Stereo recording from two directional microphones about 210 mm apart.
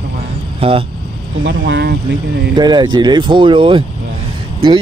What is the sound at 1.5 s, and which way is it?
Speech, 60° right (ahead or behind).